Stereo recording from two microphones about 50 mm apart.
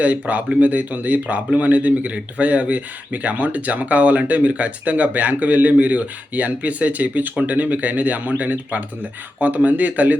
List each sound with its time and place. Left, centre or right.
0.0 s speech: right